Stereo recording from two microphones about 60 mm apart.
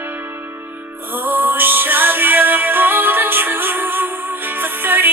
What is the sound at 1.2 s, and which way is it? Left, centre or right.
Music, right.